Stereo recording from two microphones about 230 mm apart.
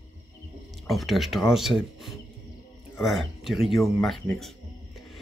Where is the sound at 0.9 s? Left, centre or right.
Centre.